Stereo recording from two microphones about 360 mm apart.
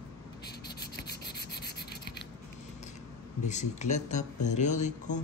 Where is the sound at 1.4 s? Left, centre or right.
Left.